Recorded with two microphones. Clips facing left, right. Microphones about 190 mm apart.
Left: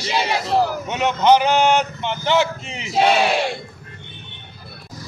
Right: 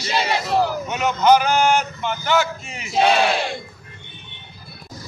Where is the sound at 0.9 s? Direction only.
25° left (ahead or behind).